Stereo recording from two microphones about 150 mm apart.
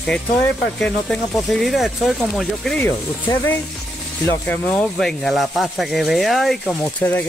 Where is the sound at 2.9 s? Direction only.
15° left (ahead or behind).